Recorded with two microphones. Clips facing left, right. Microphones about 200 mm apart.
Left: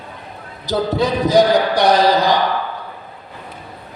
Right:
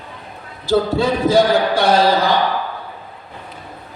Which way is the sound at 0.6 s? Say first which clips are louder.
Right 2 dB; 20° left (ahead or behind).